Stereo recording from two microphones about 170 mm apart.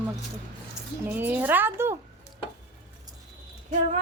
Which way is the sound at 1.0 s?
10° right (ahead or behind).